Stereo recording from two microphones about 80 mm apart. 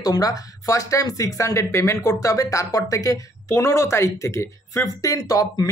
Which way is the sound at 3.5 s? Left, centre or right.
Left.